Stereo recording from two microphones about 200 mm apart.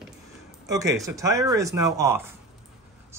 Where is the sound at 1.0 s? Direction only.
15° right (ahead or behind).